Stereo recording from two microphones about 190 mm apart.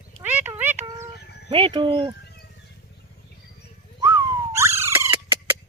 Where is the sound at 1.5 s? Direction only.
25° right (ahead or behind).